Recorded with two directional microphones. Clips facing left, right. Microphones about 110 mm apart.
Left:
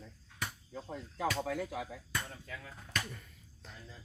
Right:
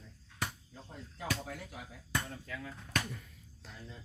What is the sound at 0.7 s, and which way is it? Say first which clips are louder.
Speech: left 7 dB; 90° left.